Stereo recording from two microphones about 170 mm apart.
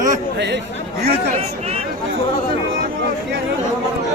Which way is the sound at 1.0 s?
35° right (ahead or behind).